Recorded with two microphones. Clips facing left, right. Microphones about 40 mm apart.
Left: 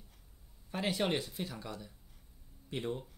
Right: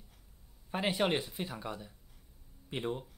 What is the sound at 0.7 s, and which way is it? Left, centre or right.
Speech, right.